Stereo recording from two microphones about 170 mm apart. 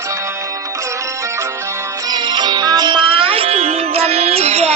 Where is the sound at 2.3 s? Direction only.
25° right (ahead or behind).